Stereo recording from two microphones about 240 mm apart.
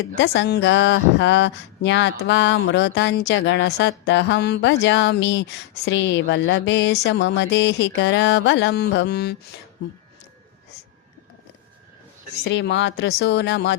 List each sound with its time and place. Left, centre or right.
0.3 s speech: left
12.5 s speech: left